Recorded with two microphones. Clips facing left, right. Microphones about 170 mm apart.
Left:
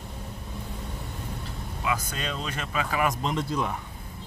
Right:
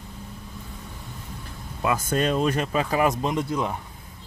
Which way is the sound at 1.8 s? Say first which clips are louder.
Right 7 dB; 50° right (ahead or behind).